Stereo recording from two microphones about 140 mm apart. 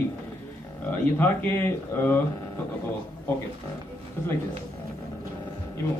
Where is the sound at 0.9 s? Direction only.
15° left (ahead or behind).